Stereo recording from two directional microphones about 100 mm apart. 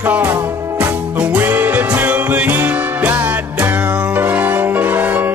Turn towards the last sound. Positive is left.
turn(degrees=-15)  # may be behind; listen again after turning